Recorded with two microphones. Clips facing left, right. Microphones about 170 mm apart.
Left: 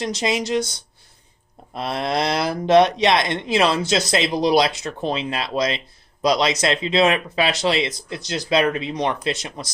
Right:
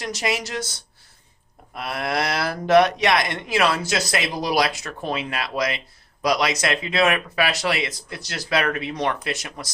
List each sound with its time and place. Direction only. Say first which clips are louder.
0.0 s speech: left 3 dB; 20° left (ahead or behind)
1.7 s speech: left 3 dB; 25° left (ahead or behind)